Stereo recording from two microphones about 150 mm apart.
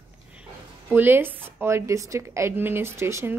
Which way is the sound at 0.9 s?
15° right (ahead or behind).